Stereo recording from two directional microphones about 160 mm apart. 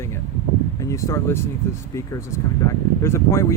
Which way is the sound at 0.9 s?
15° left (ahead or behind).